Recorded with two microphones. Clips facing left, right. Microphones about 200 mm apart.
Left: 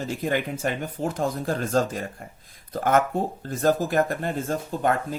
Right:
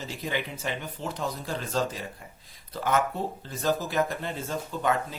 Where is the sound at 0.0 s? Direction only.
50° left (ahead or behind).